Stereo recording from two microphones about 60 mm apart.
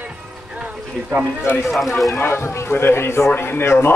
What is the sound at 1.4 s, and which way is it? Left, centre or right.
A man's voice, left.